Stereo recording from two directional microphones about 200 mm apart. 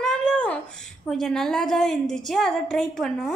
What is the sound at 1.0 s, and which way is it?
A woman's voice, centre (ahead or behind).